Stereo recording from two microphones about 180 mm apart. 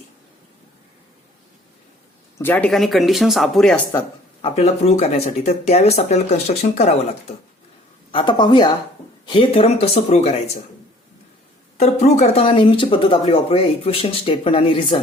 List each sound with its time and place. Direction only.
2.4 s speech: 10° left (ahead or behind)
4.4 s speech: 35° left (ahead or behind)
8.1 s speech: 25° left (ahead or behind)
11.8 s speech: 40° left (ahead or behind)